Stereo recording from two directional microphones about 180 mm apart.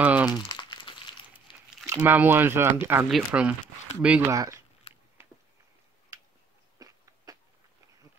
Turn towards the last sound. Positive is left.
turn(degrees=-20)  # may be behind; listen again after turning